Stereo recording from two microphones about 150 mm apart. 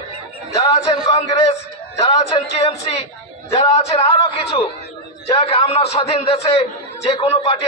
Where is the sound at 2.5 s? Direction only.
40° left (ahead or behind).